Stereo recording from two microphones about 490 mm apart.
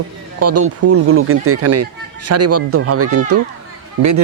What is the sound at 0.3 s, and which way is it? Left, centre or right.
Speech, right.